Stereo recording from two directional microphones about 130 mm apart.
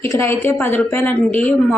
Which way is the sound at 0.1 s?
20° left (ahead or behind).